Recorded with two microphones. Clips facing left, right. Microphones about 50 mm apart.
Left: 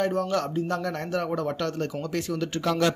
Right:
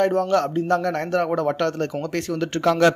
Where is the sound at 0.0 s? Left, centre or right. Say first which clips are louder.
Right 6 dB; right.